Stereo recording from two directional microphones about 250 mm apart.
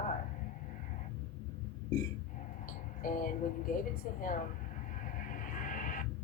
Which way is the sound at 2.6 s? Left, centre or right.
Left.